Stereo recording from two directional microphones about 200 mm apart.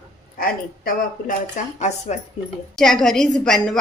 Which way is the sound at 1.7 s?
35° left (ahead or behind).